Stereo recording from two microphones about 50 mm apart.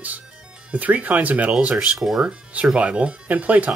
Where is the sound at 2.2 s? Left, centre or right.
Right.